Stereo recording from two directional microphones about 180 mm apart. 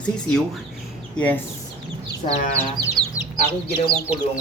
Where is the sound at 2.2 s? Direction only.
35° left (ahead or behind).